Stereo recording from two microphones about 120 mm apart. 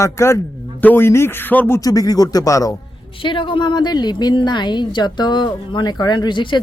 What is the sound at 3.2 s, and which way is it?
A woman's voice, 45° left (ahead or behind).